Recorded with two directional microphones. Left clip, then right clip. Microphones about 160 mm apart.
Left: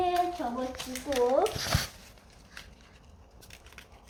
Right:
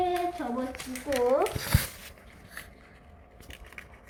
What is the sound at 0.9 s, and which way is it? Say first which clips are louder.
Speech: right 1 dB; 5° right (ahead or behind).